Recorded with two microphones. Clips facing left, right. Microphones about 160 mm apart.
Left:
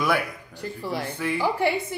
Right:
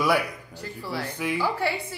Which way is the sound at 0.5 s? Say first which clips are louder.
Left 3 dB; 15° left (ahead or behind).